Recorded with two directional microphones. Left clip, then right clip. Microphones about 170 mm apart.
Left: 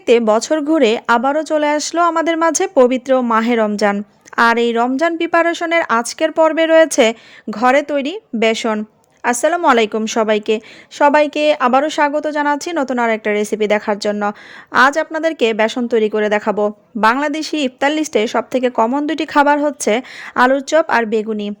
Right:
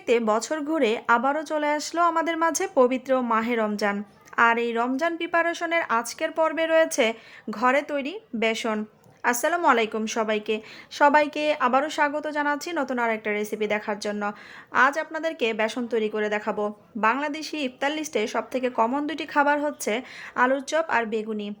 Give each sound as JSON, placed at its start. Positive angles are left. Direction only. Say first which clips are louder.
{"t": 0.0, "sound": "a woman's voice", "louder": "left 10 dB", "side_deg": 40}
{"t": 10.9, "sound": "a woman's voice", "louder": "left 7 dB", "side_deg": 40}